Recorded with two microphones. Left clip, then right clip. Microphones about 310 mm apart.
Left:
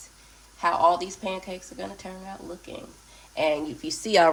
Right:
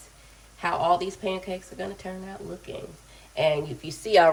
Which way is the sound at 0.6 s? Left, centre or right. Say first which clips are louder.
Left 2 dB; centre.